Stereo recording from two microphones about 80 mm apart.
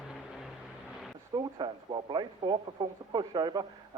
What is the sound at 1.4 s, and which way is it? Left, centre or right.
A man's voice, right.